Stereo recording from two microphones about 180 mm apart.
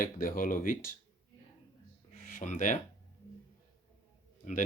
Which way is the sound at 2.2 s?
45° left (ahead or behind).